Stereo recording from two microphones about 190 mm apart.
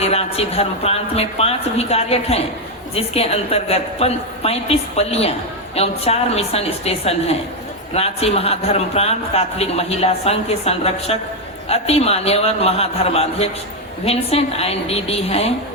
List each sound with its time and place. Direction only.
0.0 s a man's voice: 30° left (ahead or behind)